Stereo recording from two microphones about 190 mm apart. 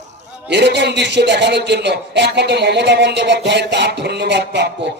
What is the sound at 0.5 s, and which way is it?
A man's voice, 65° right (ahead or behind).